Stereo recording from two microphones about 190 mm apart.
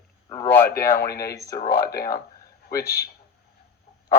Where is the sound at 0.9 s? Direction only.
55° left (ahead or behind).